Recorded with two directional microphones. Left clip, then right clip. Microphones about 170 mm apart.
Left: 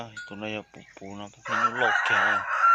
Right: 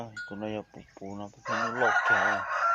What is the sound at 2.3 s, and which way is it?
Chicken, 90° right.